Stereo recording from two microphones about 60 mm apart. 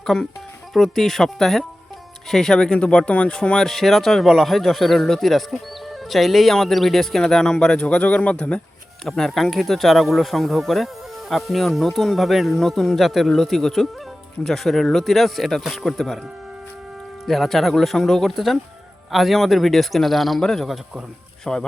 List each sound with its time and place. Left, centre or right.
0.0 s speech: centre
3.7 s speech: centre
9.0 s speech: centre
17.2 s speech: centre